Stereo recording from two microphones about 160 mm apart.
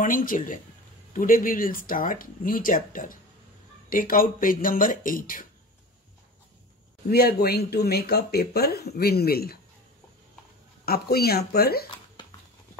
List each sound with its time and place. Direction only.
0.0 s speech: 60° left (ahead or behind)
7.1 s speech: 75° left (ahead or behind)
10.9 s speech: 75° left (ahead or behind)